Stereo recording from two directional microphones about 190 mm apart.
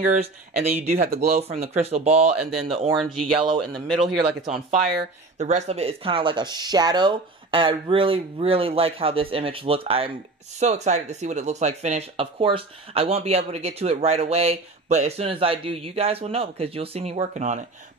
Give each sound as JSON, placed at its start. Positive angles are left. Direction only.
{"t": 0.1, "sound": "speech", "side_deg": -35}
{"t": 3.0, "sound": "a man's voice", "side_deg": 0}
{"t": 5.4, "sound": "speech", "side_deg": -35}